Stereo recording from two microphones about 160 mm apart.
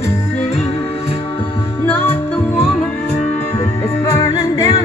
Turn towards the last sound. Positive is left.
turn(degrees=25)  # may be behind; listen again after turning